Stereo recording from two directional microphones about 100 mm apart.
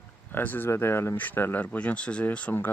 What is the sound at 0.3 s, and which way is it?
Speech, 20° left (ahead or behind).